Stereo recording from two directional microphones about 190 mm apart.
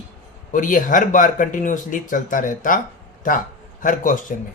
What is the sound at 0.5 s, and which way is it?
Speech, 45° left (ahead or behind).